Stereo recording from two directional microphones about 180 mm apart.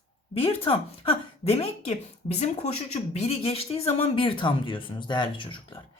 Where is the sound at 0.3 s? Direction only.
30° left (ahead or behind).